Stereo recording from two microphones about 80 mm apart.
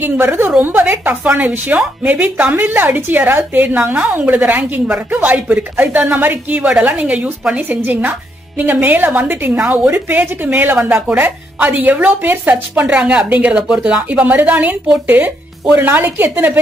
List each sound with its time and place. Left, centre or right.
0.0 s a woman's voice: right